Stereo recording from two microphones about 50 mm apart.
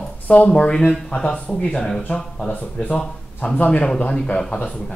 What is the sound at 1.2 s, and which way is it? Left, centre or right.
A man's voice, centre.